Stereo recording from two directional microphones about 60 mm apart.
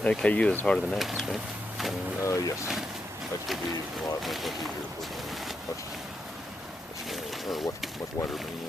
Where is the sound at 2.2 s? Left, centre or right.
Left.